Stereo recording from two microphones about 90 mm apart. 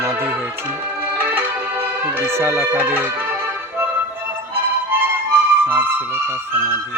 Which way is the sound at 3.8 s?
25° right (ahead or behind).